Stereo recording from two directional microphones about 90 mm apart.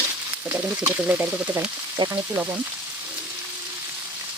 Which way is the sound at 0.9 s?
15° right (ahead or behind).